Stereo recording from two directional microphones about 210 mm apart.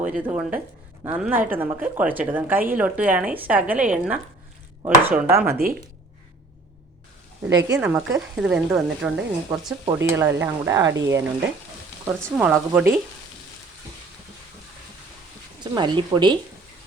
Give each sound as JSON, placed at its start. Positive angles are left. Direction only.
{"t": 0.2, "sound": "a woman's voice", "side_deg": -10}
{"t": 7.4, "sound": "a woman's voice", "side_deg": -15}
{"t": 12.2, "sound": "speech", "side_deg": 0}
{"t": 15.6, "sound": "speech", "side_deg": -20}